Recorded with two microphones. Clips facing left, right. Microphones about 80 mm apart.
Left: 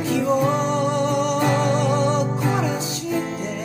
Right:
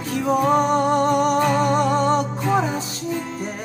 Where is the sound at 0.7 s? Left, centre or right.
Right.